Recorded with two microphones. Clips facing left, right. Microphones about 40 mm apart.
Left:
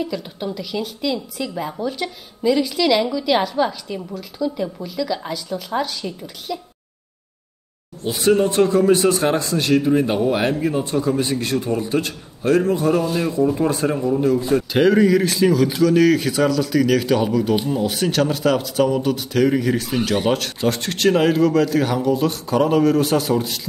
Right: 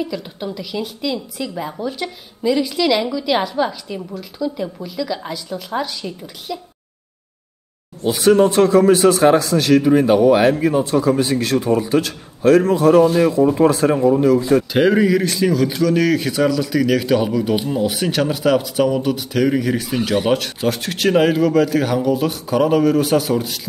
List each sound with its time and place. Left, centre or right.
0.0 s a man's voice: centre
8.0 s speech: right
14.7 s a man's voice: centre